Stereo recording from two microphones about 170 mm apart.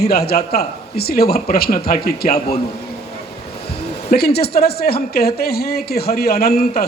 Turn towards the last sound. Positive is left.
turn(degrees=65)  # may be behind; listen again after turning